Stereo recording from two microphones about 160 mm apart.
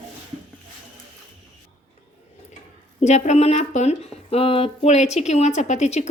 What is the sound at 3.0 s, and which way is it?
Speech, 45° left (ahead or behind).